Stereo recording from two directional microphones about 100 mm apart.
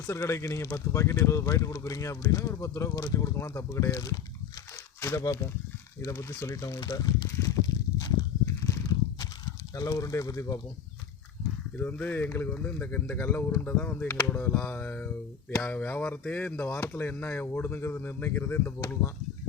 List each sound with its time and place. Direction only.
0.1 s speech: 25° left (ahead or behind)
7.9 s a sound: 35° left (ahead or behind)
9.7 s speech: 35° left (ahead or behind)
11.8 s speech: 15° left (ahead or behind)
16.6 s speech: 25° left (ahead or behind)